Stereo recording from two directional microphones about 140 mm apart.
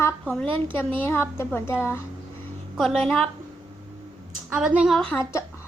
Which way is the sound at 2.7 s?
5° left (ahead or behind).